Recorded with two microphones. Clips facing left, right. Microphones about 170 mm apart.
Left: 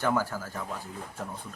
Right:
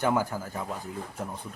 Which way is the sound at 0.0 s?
15° right (ahead or behind).